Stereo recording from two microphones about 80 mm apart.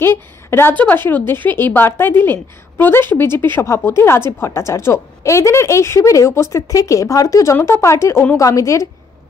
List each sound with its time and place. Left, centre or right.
0.0 s a woman's voice: left